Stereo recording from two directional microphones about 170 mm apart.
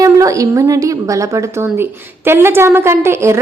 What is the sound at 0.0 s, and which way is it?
A woman's voice, 20° right (ahead or behind).